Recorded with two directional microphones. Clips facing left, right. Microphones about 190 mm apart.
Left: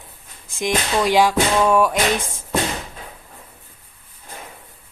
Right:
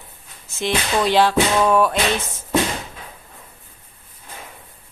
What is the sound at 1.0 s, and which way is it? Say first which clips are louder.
Speech: even; 10° left (ahead or behind).